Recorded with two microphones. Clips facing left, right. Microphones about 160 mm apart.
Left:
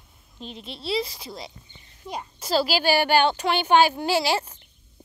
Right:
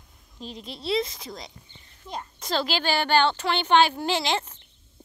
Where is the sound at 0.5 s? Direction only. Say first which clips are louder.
Right 1 dB; 25° left (ahead or behind).